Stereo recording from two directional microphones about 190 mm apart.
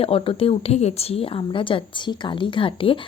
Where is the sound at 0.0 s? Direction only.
30° left (ahead or behind).